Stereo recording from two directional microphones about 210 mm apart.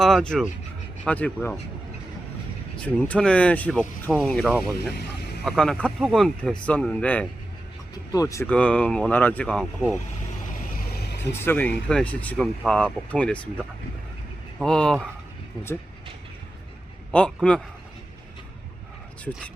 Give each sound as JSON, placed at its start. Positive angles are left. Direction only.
{"t": 0.0, "sound": "speech", "side_deg": 0}
{"t": 2.8, "sound": "speech", "side_deg": 5}
{"t": 10.8, "sound": "vehicle", "side_deg": 50}
{"t": 11.3, "sound": "speech", "side_deg": 10}
{"t": 14.6, "sound": "speech", "side_deg": 5}
{"t": 17.1, "sound": "speech", "side_deg": 5}